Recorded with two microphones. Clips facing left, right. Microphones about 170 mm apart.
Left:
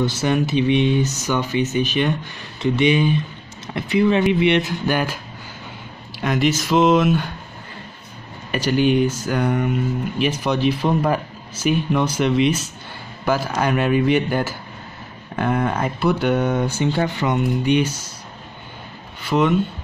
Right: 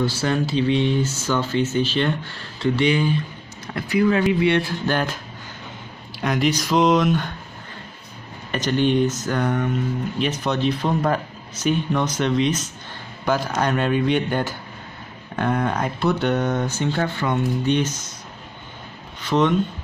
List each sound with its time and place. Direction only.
0.0 s speech: 20° left (ahead or behind)
6.2 s speech: centre (ahead or behind)
8.5 s speech: 10° left (ahead or behind)
19.2 s speech: 10° left (ahead or behind)